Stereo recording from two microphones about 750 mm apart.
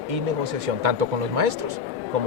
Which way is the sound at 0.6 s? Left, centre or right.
Right.